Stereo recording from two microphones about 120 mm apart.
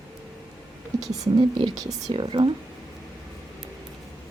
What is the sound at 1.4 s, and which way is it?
Speech, 45° right (ahead or behind).